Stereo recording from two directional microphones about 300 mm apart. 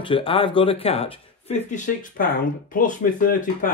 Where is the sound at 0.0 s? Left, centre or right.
Centre.